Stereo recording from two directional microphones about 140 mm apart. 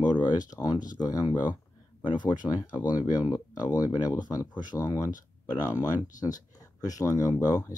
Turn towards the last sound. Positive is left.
turn(degrees=25)  # may be behind; listen again after turning